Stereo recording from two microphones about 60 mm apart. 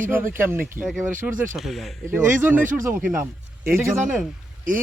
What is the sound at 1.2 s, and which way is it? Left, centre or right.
Speech, right.